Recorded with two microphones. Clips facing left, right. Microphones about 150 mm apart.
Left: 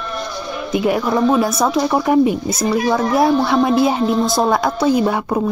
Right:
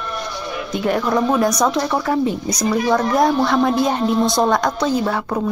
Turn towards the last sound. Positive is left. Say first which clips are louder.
# left 3 dB
turn(degrees=15)  # may be behind; listen again after turning